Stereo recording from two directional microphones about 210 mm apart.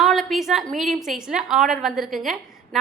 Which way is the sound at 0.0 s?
Centre (ahead or behind).